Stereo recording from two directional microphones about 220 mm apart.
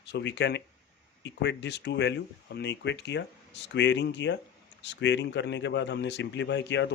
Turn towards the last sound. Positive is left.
turn(degrees=55)  # may be behind; listen again after turning